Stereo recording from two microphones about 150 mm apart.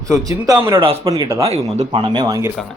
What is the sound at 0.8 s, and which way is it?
A man's voice, 40° right (ahead or behind).